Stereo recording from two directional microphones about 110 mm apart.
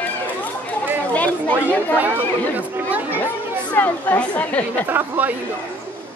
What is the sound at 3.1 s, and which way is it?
Speech, 20° left (ahead or behind).